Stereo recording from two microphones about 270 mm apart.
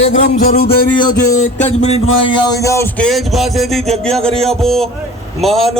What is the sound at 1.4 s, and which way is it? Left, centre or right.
Speech, left.